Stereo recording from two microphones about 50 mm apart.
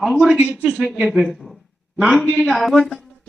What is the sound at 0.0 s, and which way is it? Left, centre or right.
Speech, centre.